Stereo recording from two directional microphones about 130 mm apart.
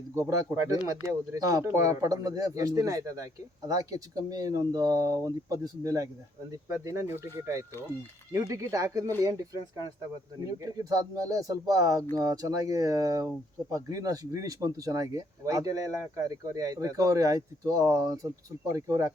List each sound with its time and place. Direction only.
0.1 s speech: 25° right (ahead or behind)